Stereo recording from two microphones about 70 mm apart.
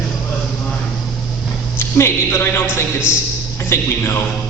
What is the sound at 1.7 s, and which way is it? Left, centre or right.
A man's voice, left.